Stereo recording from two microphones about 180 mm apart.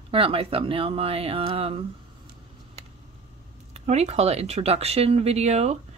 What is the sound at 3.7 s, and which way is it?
Speech, 35° right (ahead or behind).